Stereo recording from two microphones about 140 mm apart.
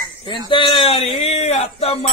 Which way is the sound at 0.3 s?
35° left (ahead or behind).